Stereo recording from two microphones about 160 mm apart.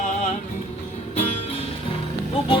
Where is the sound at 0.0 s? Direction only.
50° left (ahead or behind).